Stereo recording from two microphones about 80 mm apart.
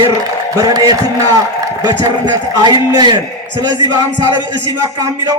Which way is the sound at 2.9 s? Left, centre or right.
Right.